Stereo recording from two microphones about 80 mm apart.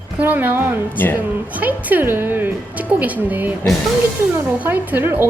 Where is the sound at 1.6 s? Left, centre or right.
Right.